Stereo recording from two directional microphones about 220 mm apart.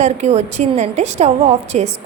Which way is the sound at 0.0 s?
30° right (ahead or behind).